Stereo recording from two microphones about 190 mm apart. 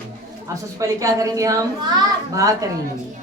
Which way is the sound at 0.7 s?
15° right (ahead or behind).